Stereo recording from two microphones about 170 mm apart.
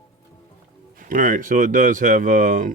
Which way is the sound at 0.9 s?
55° right (ahead or behind).